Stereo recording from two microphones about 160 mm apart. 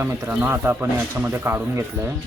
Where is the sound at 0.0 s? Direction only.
15° right (ahead or behind).